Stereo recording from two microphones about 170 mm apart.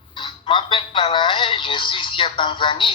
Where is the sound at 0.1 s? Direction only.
30° left (ahead or behind).